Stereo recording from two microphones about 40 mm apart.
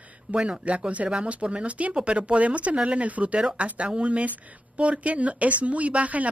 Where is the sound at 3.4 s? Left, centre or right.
Right.